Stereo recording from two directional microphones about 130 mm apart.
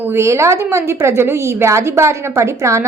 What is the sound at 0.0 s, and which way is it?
A woman's voice, 20° right (ahead or behind).